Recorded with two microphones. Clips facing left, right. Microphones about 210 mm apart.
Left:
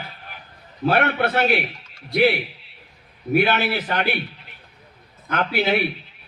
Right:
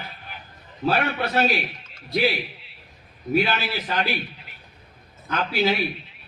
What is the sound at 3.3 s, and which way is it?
Speech, 60° left (ahead or behind).